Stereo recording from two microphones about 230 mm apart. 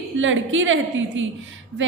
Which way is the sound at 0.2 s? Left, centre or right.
Right.